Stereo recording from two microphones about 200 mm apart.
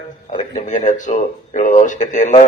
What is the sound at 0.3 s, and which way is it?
A man's voice, 40° left (ahead or behind).